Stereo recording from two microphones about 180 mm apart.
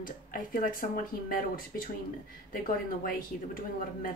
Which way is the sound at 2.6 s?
50° left (ahead or behind).